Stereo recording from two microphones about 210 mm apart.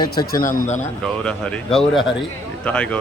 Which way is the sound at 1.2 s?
5° left (ahead or behind).